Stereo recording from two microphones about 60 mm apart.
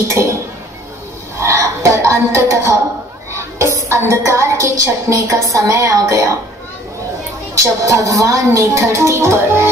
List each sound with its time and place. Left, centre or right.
0.1 s speech: right
1.4 s a woman's voice: right
7.6 s a woman's voice: right
8.5 s speech: right